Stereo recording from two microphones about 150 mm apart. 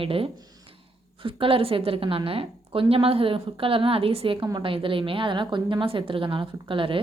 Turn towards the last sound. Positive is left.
turn(degrees=-35)  # may be behind; listen again after turning